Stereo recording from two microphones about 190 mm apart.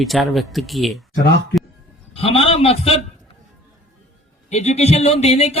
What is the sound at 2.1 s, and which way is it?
Speech, 30° left (ahead or behind).